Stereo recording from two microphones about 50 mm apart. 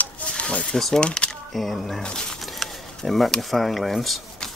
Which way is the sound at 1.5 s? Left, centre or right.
Centre.